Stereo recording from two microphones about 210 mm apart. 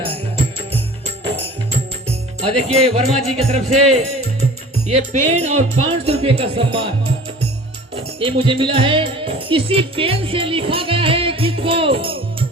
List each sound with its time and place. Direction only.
0.7 s music: 30° right (ahead or behind)
2.0 s speech: 30° right (ahead or behind)
7.9 s speech: 25° right (ahead or behind)